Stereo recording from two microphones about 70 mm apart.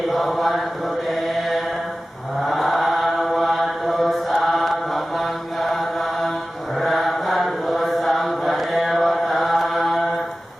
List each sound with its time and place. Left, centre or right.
0.1 s mantra: centre
2.4 s chant: centre
6.7 s mantra: centre